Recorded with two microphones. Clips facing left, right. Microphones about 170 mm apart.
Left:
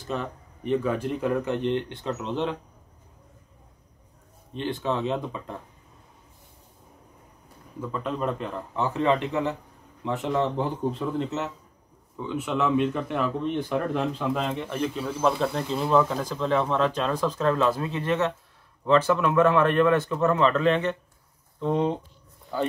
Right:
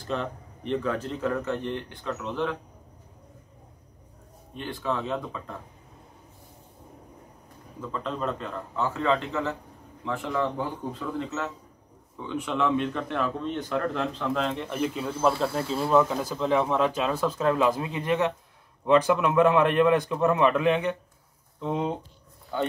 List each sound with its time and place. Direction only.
0.0 s speech: 5° left (ahead or behind); by 2.5 s 25° left (ahead or behind)
4.6 s a man's voice: 20° left (ahead or behind)
7.8 s a man's voice: 10° left (ahead or behind)
12.2 s speech: 5° left (ahead or behind)
14.7 s speech: 10° right (ahead or behind)